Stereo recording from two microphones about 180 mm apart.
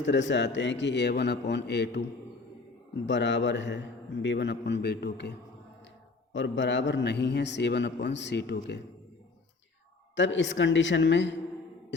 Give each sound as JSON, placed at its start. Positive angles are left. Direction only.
{"t": 0.0, "sound": "a man's voice", "side_deg": 85}
{"t": 3.1, "sound": "a man's voice", "side_deg": 90}
{"t": 6.3, "sound": "a man's voice", "side_deg": 90}
{"t": 10.2, "sound": "a woman's voice", "side_deg": 90}